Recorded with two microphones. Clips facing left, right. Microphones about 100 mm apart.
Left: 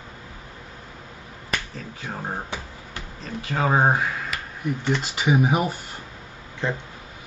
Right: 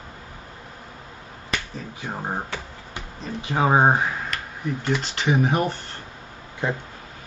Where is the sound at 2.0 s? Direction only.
15° right (ahead or behind).